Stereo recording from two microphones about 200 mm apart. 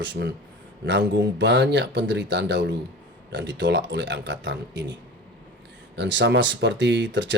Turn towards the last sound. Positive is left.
turn(degrees=-65)  # may be behind; listen again after turning